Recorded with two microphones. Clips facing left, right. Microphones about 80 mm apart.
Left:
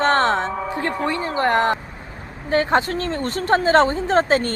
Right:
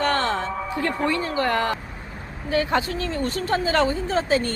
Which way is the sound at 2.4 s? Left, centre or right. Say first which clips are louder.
Left 4 dB; left.